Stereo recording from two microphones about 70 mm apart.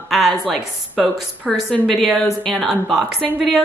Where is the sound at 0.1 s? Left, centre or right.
Centre.